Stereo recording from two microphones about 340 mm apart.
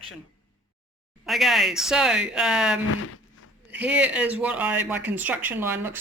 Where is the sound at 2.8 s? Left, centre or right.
Left.